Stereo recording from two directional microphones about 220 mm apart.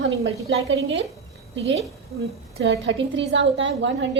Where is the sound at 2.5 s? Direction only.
50° right (ahead or behind).